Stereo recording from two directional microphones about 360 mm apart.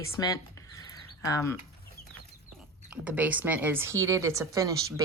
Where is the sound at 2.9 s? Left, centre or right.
Centre.